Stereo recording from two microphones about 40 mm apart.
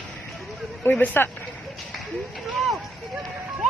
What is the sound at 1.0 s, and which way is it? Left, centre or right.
Speech, left.